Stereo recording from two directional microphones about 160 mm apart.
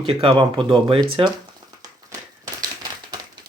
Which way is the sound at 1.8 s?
25° right (ahead or behind).